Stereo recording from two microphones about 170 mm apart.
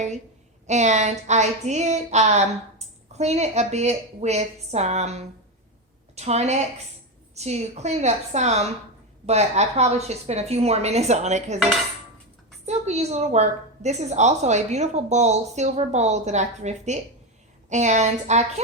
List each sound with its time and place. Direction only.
0.7 s speech: 45° right (ahead or behind)
12.6 s a woman's voice: 40° right (ahead or behind)